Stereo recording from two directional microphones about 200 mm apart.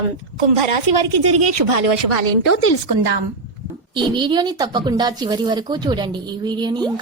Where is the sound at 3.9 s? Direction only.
25° right (ahead or behind).